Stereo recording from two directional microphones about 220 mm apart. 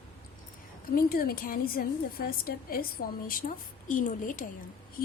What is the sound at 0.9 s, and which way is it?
A woman's voice, 40° left (ahead or behind).